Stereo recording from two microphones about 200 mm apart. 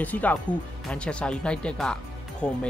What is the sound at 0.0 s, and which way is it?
Speech, 10° left (ahead or behind).